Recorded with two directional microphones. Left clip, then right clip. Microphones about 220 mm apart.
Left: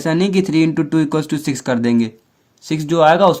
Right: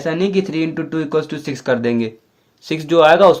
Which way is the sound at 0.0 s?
35° left (ahead or behind).